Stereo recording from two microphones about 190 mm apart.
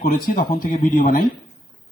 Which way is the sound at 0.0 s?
45° left (ahead or behind).